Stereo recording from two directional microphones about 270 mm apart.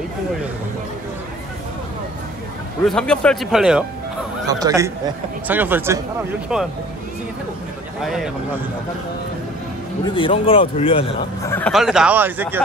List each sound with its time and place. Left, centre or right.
2.8 s speech: centre
4.5 s a man's voice: centre
8.0 s speech: centre
10.0 s a man's voice: centre
11.5 s speech: centre